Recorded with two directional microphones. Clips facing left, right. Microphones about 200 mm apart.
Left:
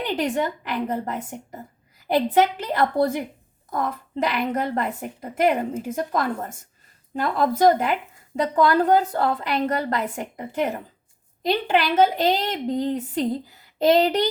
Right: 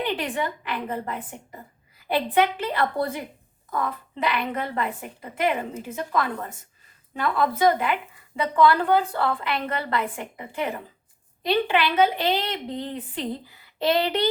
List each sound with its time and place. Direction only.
0.1 s a woman's voice: 40° left (ahead or behind)